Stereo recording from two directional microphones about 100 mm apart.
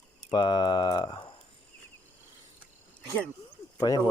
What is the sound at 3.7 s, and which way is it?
Speech, 40° left (ahead or behind).